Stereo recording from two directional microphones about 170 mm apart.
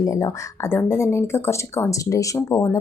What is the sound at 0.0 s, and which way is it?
Speech, 20° left (ahead or behind).